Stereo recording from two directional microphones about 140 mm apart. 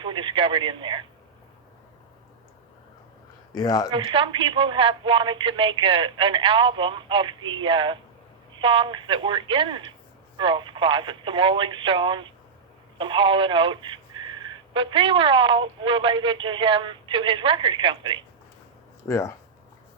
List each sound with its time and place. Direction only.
0.0 s speech: 35° right (ahead or behind)
3.5 s speech: 25° left (ahead or behind)
3.9 s speech: 35° right (ahead or behind)
19.0 s speech: 20° left (ahead or behind)